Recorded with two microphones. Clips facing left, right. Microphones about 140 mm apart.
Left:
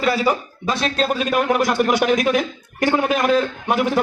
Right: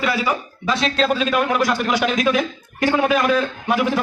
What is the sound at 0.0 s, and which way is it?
A man's voice, 40° left (ahead or behind).